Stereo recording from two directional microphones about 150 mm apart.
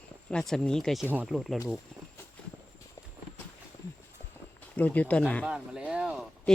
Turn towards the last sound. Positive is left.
turn(degrees=-5)  # may be behind; listen again after turning